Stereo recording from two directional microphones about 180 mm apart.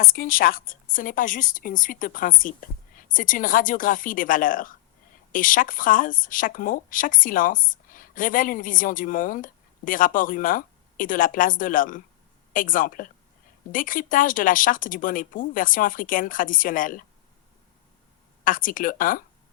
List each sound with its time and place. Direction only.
0.0 s speech: 50° left (ahead or behind)
18.4 s speech: 50° left (ahead or behind)